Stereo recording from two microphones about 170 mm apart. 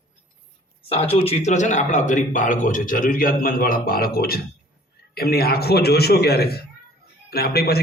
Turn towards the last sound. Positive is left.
turn(degrees=65)  # may be behind; listen again after turning